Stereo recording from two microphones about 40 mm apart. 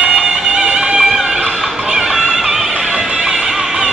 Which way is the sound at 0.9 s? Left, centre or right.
Centre.